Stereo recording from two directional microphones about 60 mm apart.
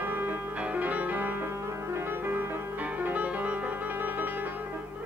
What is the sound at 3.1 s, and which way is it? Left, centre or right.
Music, right.